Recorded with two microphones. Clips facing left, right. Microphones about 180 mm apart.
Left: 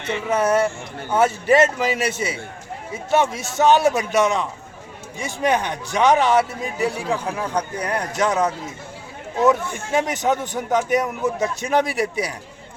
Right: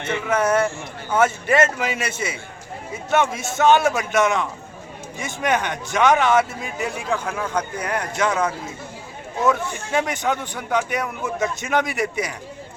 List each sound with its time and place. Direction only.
0.0 s a man's voice: 35° left (ahead or behind)
10.0 s a man's voice: 40° left (ahead or behind)